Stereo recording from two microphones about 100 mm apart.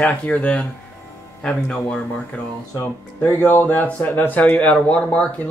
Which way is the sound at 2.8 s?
20° left (ahead or behind).